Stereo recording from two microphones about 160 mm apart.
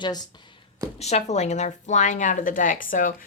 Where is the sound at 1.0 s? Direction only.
45° left (ahead or behind).